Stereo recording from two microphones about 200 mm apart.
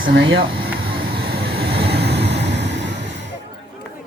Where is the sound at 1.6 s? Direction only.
55° right (ahead or behind).